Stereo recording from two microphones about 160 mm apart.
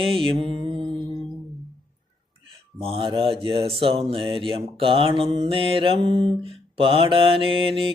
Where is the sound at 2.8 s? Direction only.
35° right (ahead or behind).